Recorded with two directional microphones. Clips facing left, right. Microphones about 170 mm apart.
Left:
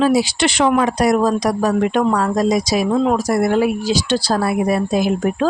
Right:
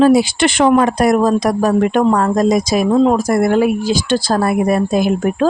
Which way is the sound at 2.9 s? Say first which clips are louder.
Right 5 dB; 35° right (ahead or behind).